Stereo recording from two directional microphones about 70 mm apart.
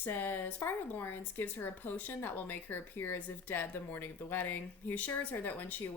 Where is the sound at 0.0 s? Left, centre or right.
Left.